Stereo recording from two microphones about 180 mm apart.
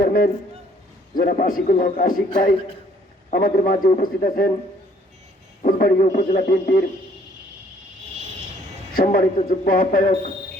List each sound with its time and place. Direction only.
0.0 s a sound: 50° left (ahead or behind)
1.1 s a man's voice: 50° left (ahead or behind)
3.2 s a man's voice: 50° left (ahead or behind)
5.6 s a man's voice: 50° left (ahead or behind)
9.0 s a man's voice: 55° left (ahead or behind)